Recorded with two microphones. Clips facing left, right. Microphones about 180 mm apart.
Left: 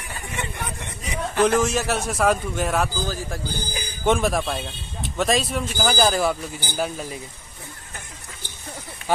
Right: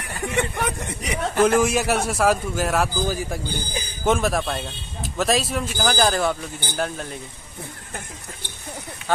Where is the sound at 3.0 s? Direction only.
10° right (ahead or behind).